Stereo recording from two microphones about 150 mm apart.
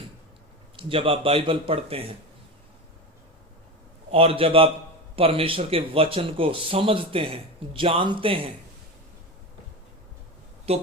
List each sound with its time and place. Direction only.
0.8 s speech: 35° right (ahead or behind)
4.1 s speech: 40° right (ahead or behind)
10.7 s speech: 40° right (ahead or behind)